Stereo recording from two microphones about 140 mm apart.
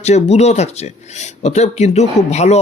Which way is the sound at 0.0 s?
50° left (ahead or behind).